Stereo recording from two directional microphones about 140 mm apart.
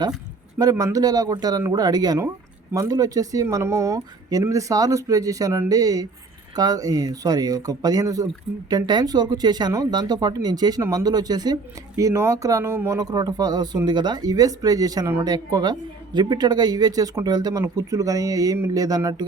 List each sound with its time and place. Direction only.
0.6 s speech: 25° right (ahead or behind)